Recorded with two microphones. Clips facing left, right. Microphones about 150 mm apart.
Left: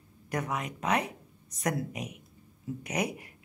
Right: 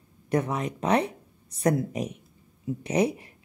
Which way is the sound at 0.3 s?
30° right (ahead or behind).